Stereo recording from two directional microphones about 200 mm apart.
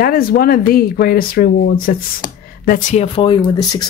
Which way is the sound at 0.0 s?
50° left (ahead or behind).